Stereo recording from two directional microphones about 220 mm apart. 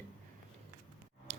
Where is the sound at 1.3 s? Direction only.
30° right (ahead or behind).